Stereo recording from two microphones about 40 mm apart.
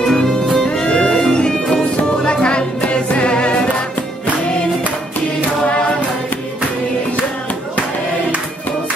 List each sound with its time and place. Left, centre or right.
0.0 s music: centre
3.1 s a capella: left